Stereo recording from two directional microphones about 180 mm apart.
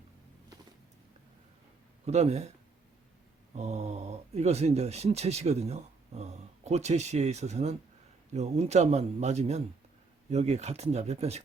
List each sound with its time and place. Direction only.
2.0 s speech: 35° right (ahead or behind)
3.5 s speech: 40° right (ahead or behind)